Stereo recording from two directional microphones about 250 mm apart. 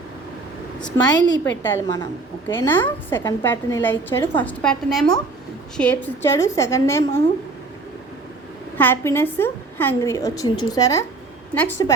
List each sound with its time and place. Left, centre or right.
0.9 s a woman's voice: centre
8.8 s a woman's voice: centre